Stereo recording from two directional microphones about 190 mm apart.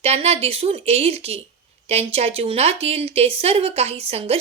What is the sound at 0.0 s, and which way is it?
A woman's voice, 35° right (ahead or behind).